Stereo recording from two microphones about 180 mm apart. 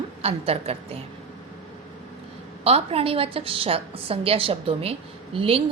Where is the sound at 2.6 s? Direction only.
35° right (ahead or behind).